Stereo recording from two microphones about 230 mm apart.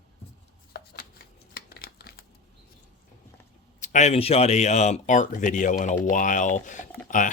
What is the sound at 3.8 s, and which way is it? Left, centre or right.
Speech, left.